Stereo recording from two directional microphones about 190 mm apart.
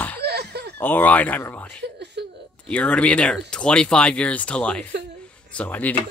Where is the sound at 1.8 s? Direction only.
60° right (ahead or behind).